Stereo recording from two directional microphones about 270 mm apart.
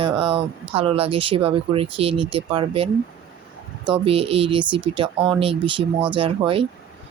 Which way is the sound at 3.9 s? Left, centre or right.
Right.